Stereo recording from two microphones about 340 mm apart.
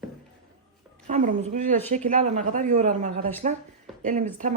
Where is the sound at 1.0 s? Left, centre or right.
Right.